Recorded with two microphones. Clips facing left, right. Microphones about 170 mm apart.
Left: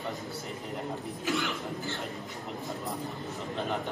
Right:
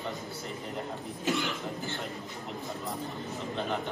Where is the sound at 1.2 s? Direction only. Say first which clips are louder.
Right 1 dB; 20° right (ahead or behind).